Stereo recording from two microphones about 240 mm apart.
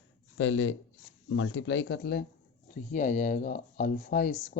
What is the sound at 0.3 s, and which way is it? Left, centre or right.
Speech, left.